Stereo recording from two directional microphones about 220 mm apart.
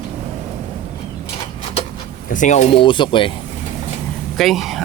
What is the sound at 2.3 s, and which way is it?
Speech, 35° left (ahead or behind).